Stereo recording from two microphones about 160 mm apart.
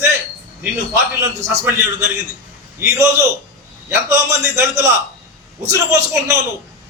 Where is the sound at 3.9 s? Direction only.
15° right (ahead or behind).